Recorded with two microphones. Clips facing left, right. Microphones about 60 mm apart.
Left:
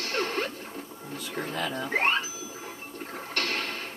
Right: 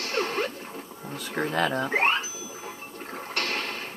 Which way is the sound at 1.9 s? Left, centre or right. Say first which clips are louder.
Right 2 dB; centre.